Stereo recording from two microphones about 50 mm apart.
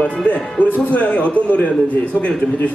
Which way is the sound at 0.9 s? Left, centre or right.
Left.